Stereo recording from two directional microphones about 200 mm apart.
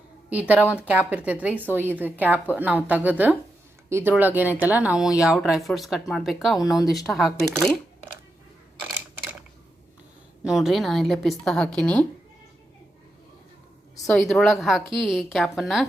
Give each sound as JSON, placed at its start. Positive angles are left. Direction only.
{"t": 0.3, "sound": "a woman's voice", "side_deg": -5}
{"t": 6.6, "sound": "speech", "side_deg": 20}
{"t": 6.9, "sound": "speech", "side_deg": 0}
{"t": 8.8, "sound": "camera", "side_deg": 0}
{"t": 10.4, "sound": "speech", "side_deg": 0}
{"t": 14.1, "sound": "speech", "side_deg": 0}